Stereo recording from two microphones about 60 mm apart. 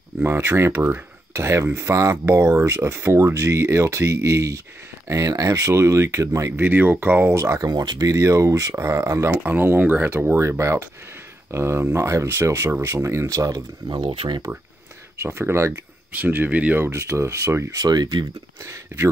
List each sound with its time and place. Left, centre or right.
0.2 s speech: right
1.3 s speech: right
2.2 s speech: right
6.5 s speech: right
7.3 s speech: right
9.5 s speech: right
15.1 s speech: right
16.1 s speech: right
16.8 s speech: right
17.7 s speech: right